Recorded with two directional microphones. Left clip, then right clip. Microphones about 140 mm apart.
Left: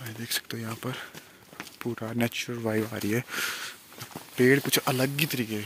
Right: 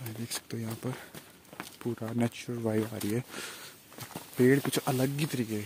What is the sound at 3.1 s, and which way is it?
Speech, 5° left (ahead or behind).